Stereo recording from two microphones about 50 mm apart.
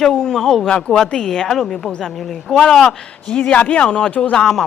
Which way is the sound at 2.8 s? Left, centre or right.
Left.